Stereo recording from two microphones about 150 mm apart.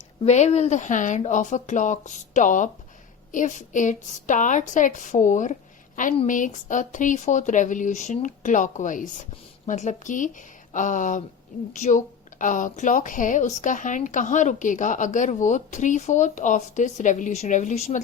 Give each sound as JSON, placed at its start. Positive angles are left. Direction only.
{"t": 0.2, "sound": "a woman's voice", "side_deg": 50}